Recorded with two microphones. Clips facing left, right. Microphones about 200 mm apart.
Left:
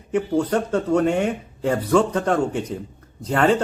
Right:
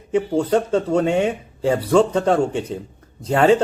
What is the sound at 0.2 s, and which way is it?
Speech, 10° right (ahead or behind).